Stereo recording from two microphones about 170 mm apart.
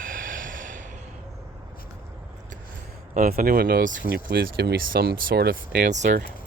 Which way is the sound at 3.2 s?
60° right (ahead or behind).